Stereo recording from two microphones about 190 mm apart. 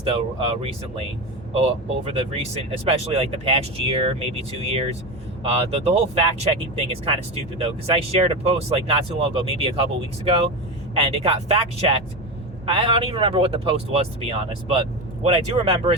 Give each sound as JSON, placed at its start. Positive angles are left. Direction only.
{"t": 0.0, "sound": "speech", "side_deg": -30}
{"t": 2.0, "sound": "speech", "side_deg": -30}
{"t": 10.9, "sound": "speech", "side_deg": -30}